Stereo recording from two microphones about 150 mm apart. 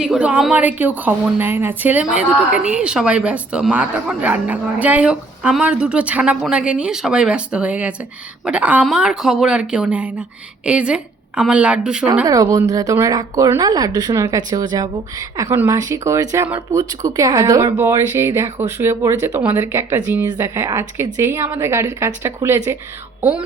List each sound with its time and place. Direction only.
0.0 s speech: 5° right (ahead or behind)
12.2 s speech: 25° right (ahead or behind)
15.4 s speech: 15° right (ahead or behind)